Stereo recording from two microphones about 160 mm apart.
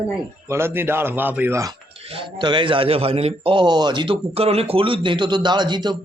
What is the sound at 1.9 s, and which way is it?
A man's voice, 35° right (ahead or behind).